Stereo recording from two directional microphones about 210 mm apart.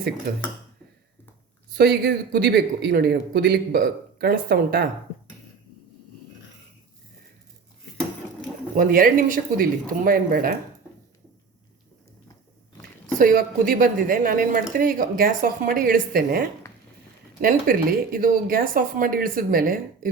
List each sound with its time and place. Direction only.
0.3 s speech: 45° right (ahead or behind)
1.7 s speech: 45° right (ahead or behind)
8.7 s speech: 40° right (ahead or behind)
13.1 s speech: 40° right (ahead or behind)
17.4 s speech: 40° right (ahead or behind)